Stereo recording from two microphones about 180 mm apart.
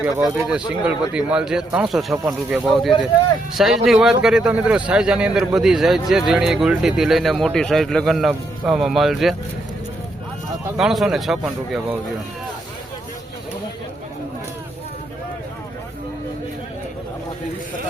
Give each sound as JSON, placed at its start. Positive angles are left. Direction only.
{"t": 0.0, "sound": "speech", "side_deg": -5}
{"t": 10.8, "sound": "speech", "side_deg": 0}